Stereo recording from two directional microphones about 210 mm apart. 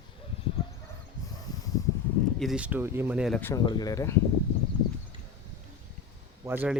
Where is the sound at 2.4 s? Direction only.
5° right (ahead or behind).